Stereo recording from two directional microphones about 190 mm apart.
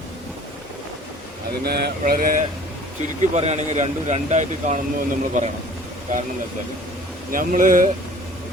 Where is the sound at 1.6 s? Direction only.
55° right (ahead or behind).